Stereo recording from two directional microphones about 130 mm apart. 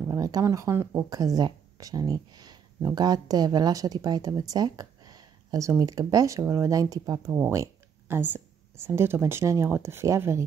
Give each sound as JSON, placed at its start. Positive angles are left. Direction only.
{"t": 0.1, "sound": "speech", "side_deg": -25}